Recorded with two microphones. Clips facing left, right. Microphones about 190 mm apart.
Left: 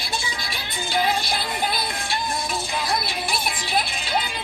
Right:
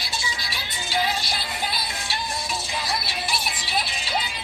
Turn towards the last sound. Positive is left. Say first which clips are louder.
# left 3 dB
turn(degrees=50)  # may be behind; listen again after turning